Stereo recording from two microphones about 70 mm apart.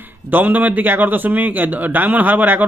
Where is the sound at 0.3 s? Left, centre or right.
Right.